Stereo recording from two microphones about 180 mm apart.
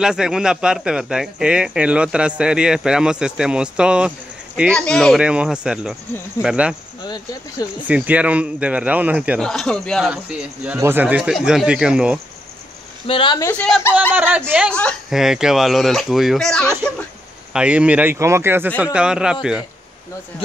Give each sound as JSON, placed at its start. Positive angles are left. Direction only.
{"t": 0.0, "sound": "speech", "side_deg": -5}
{"t": 4.6, "sound": "a man's voice", "side_deg": 5}
{"t": 7.8, "sound": "a man's voice", "side_deg": -10}
{"t": 9.4, "sound": "speech", "side_deg": 5}
{"t": 13.0, "sound": "speech", "side_deg": 30}
{"t": 13.5, "sound": "speech", "side_deg": 0}
{"t": 14.1, "sound": "a man's voice", "side_deg": -10}
{"t": 14.7, "sound": "a man's voice", "side_deg": 5}